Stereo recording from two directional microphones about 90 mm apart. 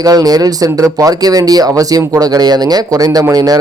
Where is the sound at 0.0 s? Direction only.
45° right (ahead or behind).